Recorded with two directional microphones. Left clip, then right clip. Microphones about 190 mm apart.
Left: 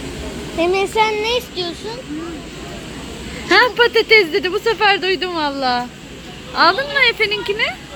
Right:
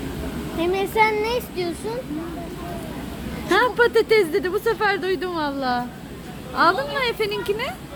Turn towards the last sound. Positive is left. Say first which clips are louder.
# left 6 dB
turn(degrees=-5)  # may be behind; listen again after turning